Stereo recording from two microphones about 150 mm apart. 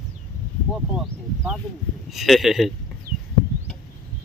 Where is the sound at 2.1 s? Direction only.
Centre (ahead or behind).